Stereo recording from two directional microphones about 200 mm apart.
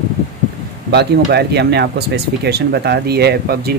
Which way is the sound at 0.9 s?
55° right (ahead or behind).